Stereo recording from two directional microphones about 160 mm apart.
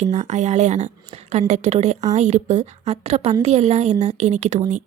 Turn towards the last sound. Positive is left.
turn(degrees=-50)  # may be behind; listen again after turning